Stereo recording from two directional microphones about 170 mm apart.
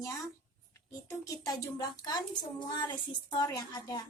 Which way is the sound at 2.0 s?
25° left (ahead or behind).